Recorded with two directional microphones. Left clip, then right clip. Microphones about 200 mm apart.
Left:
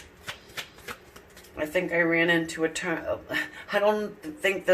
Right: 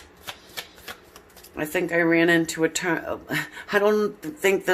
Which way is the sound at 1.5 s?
60° right (ahead or behind).